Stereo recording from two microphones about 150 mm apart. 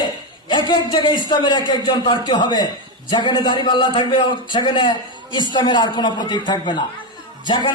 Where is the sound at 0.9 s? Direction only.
30° left (ahead or behind).